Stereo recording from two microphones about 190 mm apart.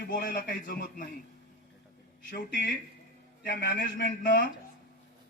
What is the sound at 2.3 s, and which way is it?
Speech, 50° left (ahead or behind).